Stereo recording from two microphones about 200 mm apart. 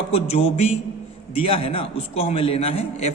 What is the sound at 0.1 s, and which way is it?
A man's voice, 30° left (ahead or behind).